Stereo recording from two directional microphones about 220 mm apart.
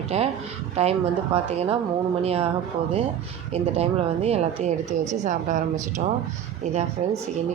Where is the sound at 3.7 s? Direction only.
30° right (ahead or behind).